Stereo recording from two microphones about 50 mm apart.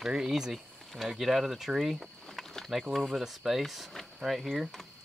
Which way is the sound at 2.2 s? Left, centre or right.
Centre.